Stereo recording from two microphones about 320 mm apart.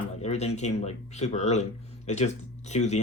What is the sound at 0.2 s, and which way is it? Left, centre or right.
Speech, centre.